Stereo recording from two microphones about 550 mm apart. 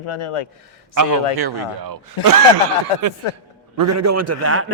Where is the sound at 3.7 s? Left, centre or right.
Right.